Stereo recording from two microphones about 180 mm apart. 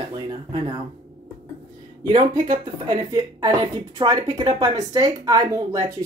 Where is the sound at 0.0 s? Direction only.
25° right (ahead or behind).